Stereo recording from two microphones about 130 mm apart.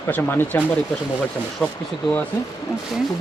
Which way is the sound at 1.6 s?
5° left (ahead or behind).